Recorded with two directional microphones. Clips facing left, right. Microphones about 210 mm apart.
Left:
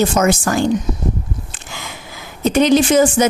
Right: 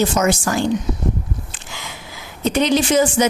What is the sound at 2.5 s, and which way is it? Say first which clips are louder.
Speech: left 4 dB; 50° left (ahead or behind).